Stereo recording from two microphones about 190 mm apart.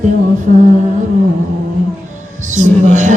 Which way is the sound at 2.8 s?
40° right (ahead or behind).